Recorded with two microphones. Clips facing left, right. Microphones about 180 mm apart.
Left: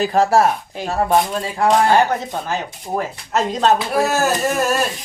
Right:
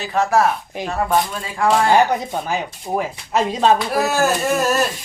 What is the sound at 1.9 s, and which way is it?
Speech, 15° right (ahead or behind).